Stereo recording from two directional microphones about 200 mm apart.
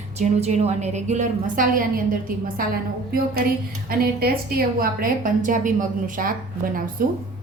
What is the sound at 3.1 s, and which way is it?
A woman's voice, 45° right (ahead or behind).